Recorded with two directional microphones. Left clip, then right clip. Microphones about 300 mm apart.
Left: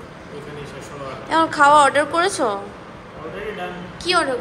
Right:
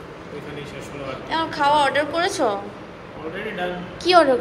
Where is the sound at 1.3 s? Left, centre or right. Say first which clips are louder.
Left 6 dB; left.